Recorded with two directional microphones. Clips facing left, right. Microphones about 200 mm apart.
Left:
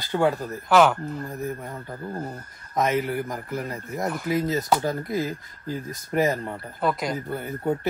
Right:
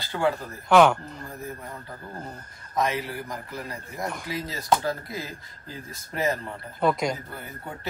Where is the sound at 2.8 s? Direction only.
50° left (ahead or behind).